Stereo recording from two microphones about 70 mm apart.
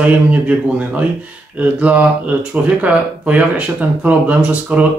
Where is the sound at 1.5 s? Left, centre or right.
Right.